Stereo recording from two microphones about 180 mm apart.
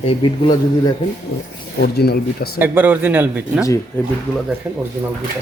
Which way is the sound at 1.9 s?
60° left (ahead or behind).